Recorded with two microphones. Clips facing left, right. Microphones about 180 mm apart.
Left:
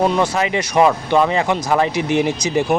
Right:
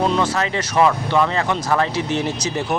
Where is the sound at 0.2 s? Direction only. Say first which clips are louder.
Left 3 dB; 15° left (ahead or behind).